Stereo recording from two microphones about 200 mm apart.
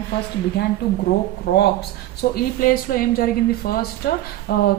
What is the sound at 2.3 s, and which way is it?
A woman's voice, 45° left (ahead or behind).